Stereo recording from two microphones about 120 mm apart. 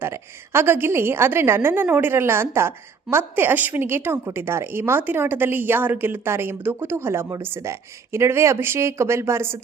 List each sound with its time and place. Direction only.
0.0 s a woman's voice: 20° right (ahead or behind)